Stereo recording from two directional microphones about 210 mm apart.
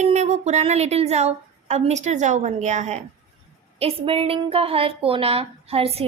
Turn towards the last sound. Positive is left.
turn(degrees=-25)  # may be behind; listen again after turning